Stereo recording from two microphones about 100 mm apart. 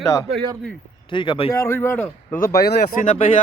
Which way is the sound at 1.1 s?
55° left (ahead or behind).